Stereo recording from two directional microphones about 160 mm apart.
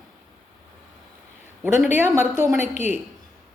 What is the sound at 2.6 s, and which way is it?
Speech, 50° left (ahead or behind).